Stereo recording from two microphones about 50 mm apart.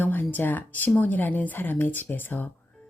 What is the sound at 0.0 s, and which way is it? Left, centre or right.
Speech, left.